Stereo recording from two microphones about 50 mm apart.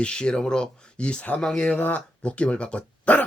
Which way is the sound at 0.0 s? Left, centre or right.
Centre.